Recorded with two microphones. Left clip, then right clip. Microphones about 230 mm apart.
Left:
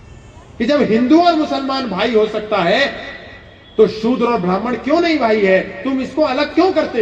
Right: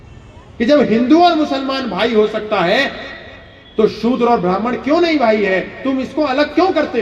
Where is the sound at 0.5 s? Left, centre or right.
Right.